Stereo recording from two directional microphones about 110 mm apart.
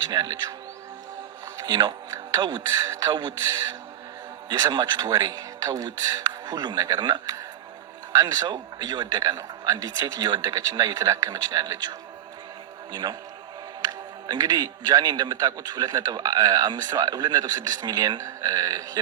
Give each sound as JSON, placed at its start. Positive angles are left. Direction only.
{"t": 0.1, "sound": "a man's voice", "side_deg": -35}
{"t": 1.6, "sound": "a man's voice", "side_deg": -40}